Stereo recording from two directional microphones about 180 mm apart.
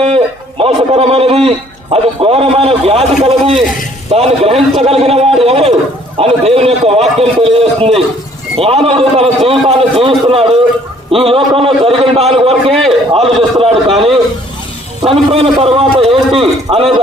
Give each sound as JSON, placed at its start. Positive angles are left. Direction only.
{"t": 0.6, "sound": "a man's voice", "side_deg": -35}
{"t": 12.7, "sound": "a man's voice", "side_deg": 0}
{"t": 13.1, "sound": "a man's voice", "side_deg": -30}
{"t": 15.0, "sound": "a man's voice", "side_deg": -30}